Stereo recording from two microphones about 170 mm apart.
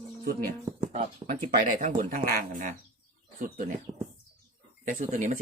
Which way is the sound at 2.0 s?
55° right (ahead or behind).